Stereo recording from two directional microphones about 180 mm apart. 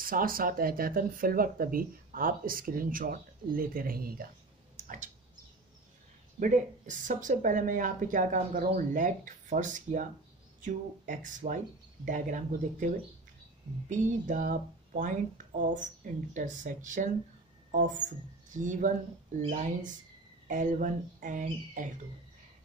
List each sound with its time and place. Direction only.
0.0 s speech: 50° right (ahead or behind)
4.7 s a sound: 45° right (ahead or behind)
6.4 s speech: 45° right (ahead or behind)